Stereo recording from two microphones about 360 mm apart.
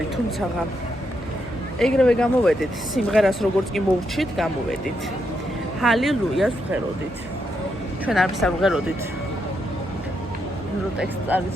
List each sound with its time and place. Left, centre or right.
1.8 s speech: centre
5.8 s speech: centre
8.0 s speech: centre
10.9 s speech: centre